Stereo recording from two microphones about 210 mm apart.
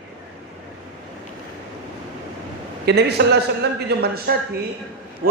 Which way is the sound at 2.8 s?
50° right (ahead or behind).